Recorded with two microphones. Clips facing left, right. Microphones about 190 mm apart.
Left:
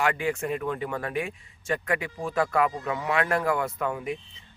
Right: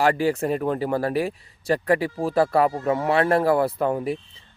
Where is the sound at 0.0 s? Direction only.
35° right (ahead or behind).